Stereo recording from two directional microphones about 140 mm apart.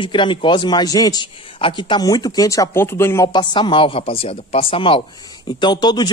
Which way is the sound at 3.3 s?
35° left (ahead or behind).